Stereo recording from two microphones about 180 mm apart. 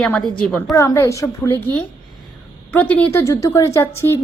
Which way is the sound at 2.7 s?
10° left (ahead or behind).